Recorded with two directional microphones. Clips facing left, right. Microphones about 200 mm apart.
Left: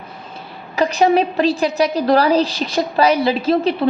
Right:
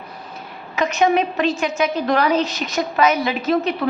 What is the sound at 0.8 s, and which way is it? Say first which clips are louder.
A woman's voice: left 3 dB; 35° left (ahead or behind).